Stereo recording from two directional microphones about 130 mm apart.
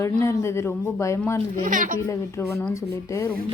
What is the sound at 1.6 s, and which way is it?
Speech, 90° right.